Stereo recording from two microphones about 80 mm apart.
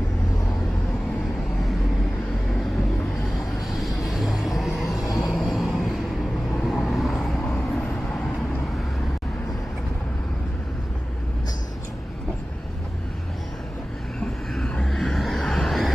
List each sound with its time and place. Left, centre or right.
3.7 s vehicle: centre
4.9 s vehicle: left
5.3 s vehicle: centre
14.2 s vehicle: centre